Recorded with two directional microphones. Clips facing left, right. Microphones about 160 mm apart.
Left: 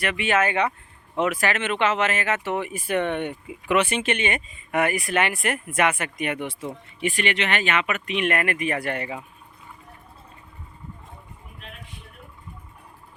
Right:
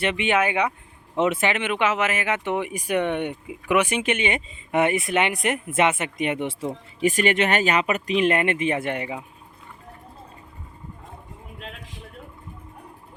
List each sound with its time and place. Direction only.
0.0 s speech: 25° right (ahead or behind)
7.1 s speech: 45° right (ahead or behind); by 9.2 s 15° right (ahead or behind)